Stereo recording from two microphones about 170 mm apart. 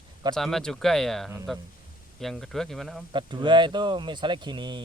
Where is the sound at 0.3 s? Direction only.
Centre (ahead or behind).